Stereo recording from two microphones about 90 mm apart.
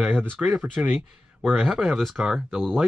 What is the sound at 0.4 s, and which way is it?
Speech, 10° right (ahead or behind).